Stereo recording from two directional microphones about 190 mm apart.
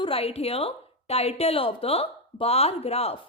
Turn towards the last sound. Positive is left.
turn(degrees=30)  # may be behind; listen again after turning